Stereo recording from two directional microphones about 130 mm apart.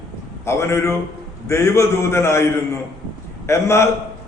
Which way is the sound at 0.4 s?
20° left (ahead or behind).